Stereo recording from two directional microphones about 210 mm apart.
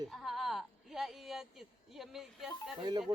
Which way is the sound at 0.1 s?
Centre (ahead or behind).